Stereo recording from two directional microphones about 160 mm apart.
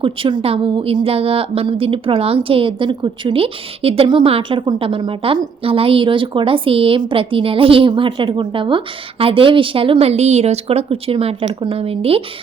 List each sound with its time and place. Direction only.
0.0 s a woman's voice: 30° right (ahead or behind)